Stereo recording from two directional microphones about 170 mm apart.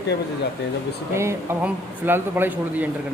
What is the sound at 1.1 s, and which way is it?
Speech, 15° right (ahead or behind).